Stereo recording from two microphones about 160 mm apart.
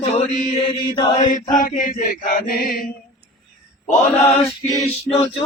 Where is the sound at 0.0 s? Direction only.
40° left (ahead or behind).